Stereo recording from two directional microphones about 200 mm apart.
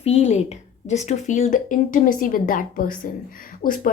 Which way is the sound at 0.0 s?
30° left (ahead or behind).